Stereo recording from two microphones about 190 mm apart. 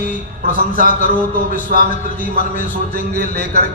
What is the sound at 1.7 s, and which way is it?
A man's voice, 45° left (ahead or behind).